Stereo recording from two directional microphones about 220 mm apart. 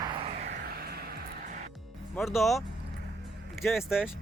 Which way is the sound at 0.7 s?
45° right (ahead or behind).